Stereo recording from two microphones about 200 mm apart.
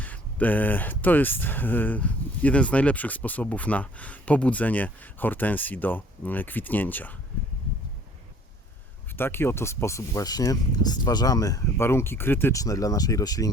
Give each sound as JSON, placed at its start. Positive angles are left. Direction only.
{"t": 0.0, "sound": "speech", "side_deg": 10}
{"t": 9.1, "sound": "speech", "side_deg": 10}